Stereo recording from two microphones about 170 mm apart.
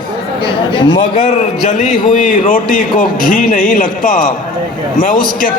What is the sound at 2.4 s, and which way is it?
A man's voice, 55° left (ahead or behind).